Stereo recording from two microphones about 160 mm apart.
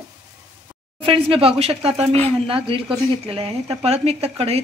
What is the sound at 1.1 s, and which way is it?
Speech, 35° right (ahead or behind).